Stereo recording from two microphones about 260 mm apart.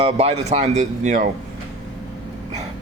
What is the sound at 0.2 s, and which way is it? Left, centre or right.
Speech, right.